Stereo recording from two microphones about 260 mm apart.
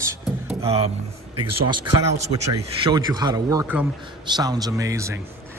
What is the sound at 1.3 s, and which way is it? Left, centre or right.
Speech, right.